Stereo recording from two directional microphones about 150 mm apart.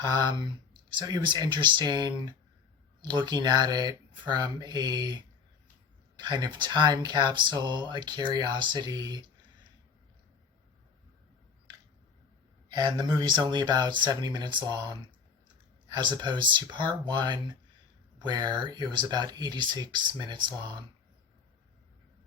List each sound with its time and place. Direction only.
0.0 s speech: 30° right (ahead or behind)
12.6 s speech: 25° right (ahead or behind)
15.9 s speech: 30° right (ahead or behind)